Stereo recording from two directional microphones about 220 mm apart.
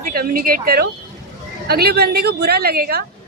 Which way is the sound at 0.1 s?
40° right (ahead or behind).